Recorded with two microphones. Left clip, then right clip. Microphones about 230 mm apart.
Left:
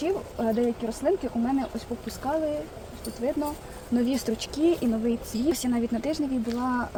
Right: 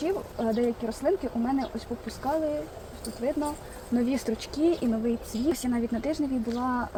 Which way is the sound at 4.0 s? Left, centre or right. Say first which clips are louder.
Left 1 dB; centre.